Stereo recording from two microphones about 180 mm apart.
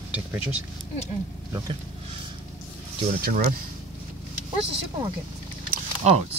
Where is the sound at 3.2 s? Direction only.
55° right (ahead or behind).